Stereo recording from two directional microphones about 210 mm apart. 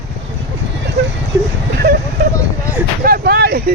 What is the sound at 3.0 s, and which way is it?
Vehicle, 45° right (ahead or behind).